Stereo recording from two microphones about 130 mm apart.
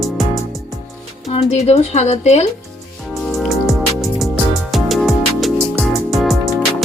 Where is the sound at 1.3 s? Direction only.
55° left (ahead or behind).